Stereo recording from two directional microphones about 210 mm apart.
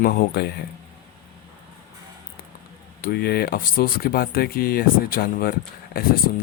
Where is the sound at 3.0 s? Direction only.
45° left (ahead or behind).